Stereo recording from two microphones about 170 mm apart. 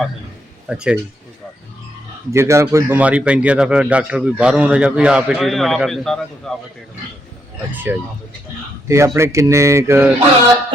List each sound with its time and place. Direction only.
0.7 s a man's voice: 5° right (ahead or behind)
2.3 s a man's voice: 15° right (ahead or behind); by 6.5 s 5° left (ahead or behind)
7.9 s a man's voice: 10° right (ahead or behind)